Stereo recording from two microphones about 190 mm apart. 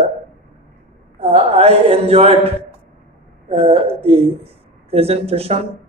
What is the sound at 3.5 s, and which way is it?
Speech, 30° right (ahead or behind).